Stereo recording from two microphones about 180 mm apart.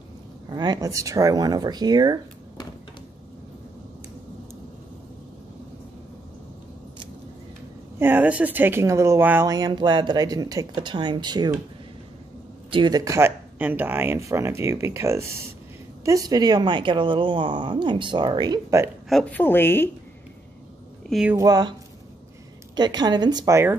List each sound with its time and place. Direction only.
0.5 s speech: 25° right (ahead or behind)
8.0 s speech: 10° right (ahead or behind)
12.7 s speech: 25° right (ahead or behind)
19.0 s a woman's voice: 5° left (ahead or behind)
21.1 s speech: 5° right (ahead or behind)
21.4 s speech: 20° right (ahead or behind)
22.8 s speech: 25° right (ahead or behind)